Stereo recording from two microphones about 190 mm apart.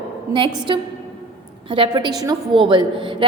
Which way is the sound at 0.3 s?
25° right (ahead or behind).